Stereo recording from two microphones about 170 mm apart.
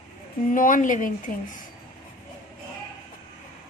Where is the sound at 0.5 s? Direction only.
50° left (ahead or behind).